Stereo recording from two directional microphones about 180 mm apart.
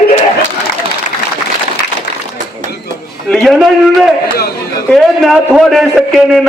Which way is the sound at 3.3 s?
Centre (ahead or behind).